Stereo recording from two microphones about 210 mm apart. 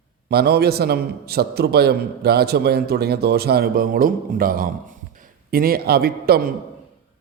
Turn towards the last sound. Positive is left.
turn(degrees=-45)  # may be behind; listen again after turning